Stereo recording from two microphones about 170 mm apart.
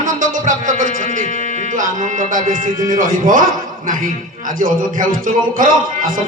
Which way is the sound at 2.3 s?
50° right (ahead or behind).